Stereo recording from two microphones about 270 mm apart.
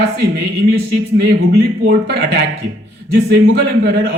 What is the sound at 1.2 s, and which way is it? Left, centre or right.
A man's voice, right.